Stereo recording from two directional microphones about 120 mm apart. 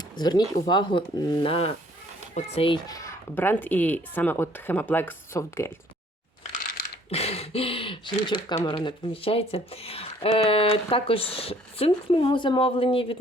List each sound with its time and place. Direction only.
0.2 s speech: 35° left (ahead or behind)
2.8 s speech: 30° left (ahead or behind)
3.3 s speech: 15° left (ahead or behind)
7.1 s speech: 60° left (ahead or behind)